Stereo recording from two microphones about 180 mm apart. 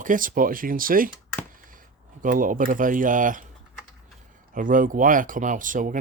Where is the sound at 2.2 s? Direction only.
50° right (ahead or behind).